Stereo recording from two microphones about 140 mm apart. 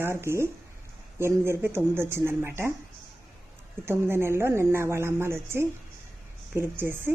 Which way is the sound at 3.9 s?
15° right (ahead or behind).